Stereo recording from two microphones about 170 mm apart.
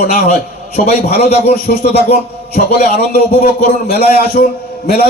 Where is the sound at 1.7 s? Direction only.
55° left (ahead or behind).